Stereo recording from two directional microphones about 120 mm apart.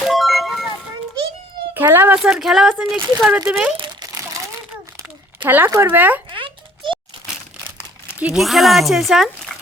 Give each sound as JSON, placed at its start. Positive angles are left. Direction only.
{"t": 0.0, "sound": "a sound", "side_deg": 0}
{"t": 1.7, "sound": "cat", "side_deg": -15}
{"t": 2.1, "sound": "speech", "side_deg": -5}
{"t": 4.1, "sound": "crumpling", "side_deg": -25}
{"t": 5.5, "sound": "speech", "side_deg": -15}
{"t": 6.3, "sound": "a sound", "side_deg": -45}
{"t": 8.2, "sound": "speech", "side_deg": -5}
{"t": 9.5, "sound": "dog", "side_deg": 5}